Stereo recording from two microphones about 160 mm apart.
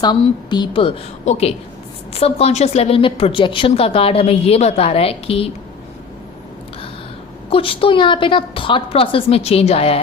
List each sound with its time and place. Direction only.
0.0 s a woman's voice: 25° left (ahead or behind)
1.2 s a woman's voice: 45° left (ahead or behind)
7.5 s a woman's voice: 35° left (ahead or behind)